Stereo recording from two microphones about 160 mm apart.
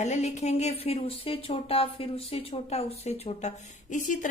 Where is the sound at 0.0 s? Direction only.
45° left (ahead or behind).